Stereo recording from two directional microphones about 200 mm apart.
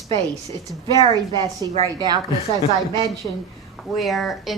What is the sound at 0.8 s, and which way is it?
A woman's voice, 25° right (ahead or behind).